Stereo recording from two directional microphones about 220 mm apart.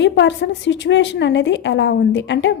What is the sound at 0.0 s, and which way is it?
A woman's voice, 55° left (ahead or behind).